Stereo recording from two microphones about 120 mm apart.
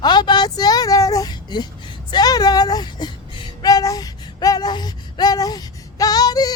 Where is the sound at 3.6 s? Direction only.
30° left (ahead or behind).